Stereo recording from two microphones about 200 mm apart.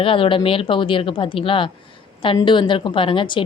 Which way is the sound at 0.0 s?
25° left (ahead or behind).